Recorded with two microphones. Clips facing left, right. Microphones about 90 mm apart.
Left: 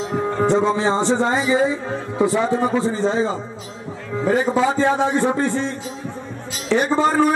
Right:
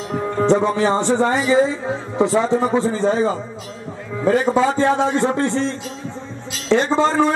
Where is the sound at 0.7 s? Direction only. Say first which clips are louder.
Right 1 dB; 20° left (ahead or behind).